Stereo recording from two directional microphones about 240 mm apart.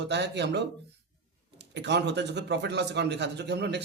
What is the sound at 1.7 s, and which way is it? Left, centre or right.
A man's voice, right.